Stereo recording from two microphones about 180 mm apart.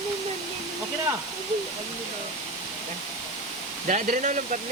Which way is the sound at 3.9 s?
45° right (ahead or behind).